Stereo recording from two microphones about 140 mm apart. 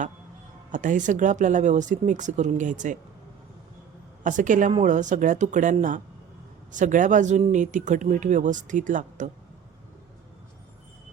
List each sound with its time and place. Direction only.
0.7 s speech: 65° right (ahead or behind)
4.2 s speech: 65° right (ahead or behind)